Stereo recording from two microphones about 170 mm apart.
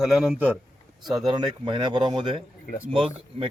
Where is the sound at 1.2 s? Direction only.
25° right (ahead or behind).